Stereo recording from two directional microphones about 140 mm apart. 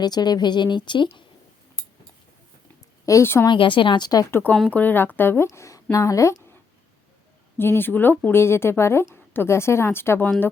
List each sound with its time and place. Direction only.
0.0 s speech: 30° left (ahead or behind)
3.1 s a woman's voice: 20° left (ahead or behind)
3.4 s speech: 35° left (ahead or behind)
4.3 s a woman's voice: 15° left (ahead or behind)
7.6 s a woman's voice: 15° left (ahead or behind)